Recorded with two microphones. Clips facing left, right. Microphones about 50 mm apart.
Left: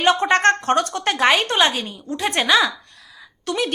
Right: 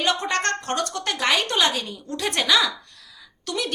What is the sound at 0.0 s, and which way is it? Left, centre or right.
A woman's voice, left.